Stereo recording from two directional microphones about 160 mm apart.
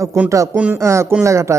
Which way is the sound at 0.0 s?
20° right (ahead or behind).